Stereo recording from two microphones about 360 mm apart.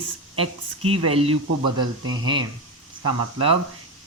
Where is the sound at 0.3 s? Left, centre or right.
Centre.